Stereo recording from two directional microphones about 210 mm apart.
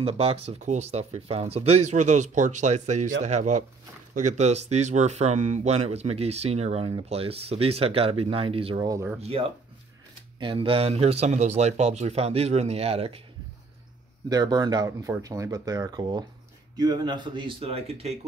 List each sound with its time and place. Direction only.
0.0 s speech: 25° right (ahead or behind)
9.2 s speech: 30° right (ahead or behind)
14.3 s speech: 20° right (ahead or behind)